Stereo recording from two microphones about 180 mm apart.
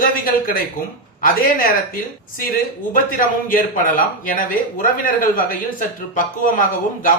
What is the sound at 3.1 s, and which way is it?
Speech, 50° left (ahead or behind).